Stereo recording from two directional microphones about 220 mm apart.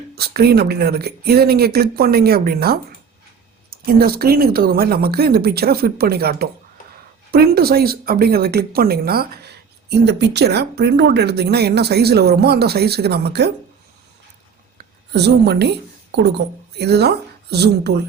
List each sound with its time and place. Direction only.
0.2 s speech: 45° right (ahead or behind)
14.8 s a sound: 45° right (ahead or behind)
16.4 s speech: 50° right (ahead or behind)